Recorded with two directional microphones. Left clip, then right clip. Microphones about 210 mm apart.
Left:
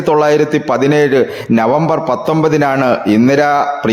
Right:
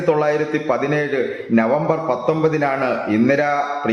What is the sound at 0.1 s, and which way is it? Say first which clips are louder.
A man's voice: left 7 dB; 50° left (ahead or behind).